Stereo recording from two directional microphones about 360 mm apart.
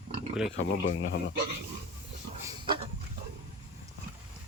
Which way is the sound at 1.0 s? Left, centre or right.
Left.